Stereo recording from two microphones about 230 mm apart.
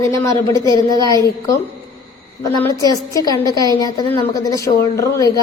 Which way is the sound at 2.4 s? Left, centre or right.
Centre.